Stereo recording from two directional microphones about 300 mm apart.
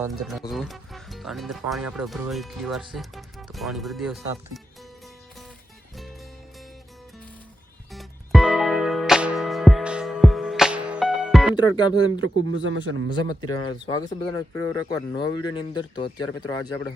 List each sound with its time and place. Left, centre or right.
0.0 s speech: centre
7.9 s music: centre
11.5 s speech: centre
12.2 s speech: right
13.2 s speech: centre